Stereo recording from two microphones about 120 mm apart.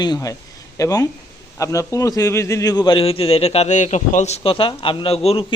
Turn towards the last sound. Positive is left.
turn(degrees=55)  # may be behind; listen again after turning